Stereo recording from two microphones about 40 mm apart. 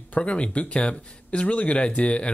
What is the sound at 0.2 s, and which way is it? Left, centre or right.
Speech, left.